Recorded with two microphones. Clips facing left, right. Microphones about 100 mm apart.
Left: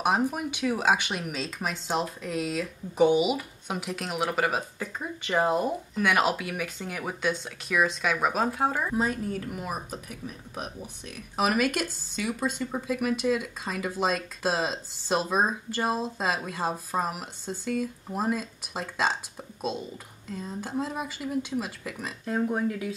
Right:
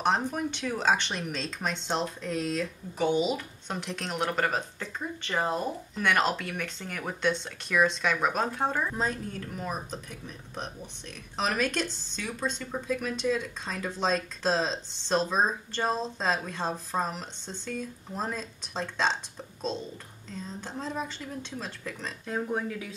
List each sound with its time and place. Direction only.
0.0 s speech: 10° left (ahead or behind)
11.3 s speech: 10° left (ahead or behind)